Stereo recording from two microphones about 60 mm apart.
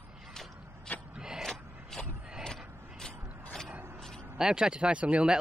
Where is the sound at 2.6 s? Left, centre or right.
Right.